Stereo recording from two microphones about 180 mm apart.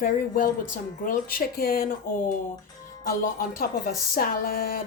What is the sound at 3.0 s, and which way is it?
Speech, 50° left (ahead or behind).